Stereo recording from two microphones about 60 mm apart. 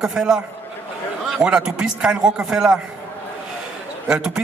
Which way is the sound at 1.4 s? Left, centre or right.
Centre.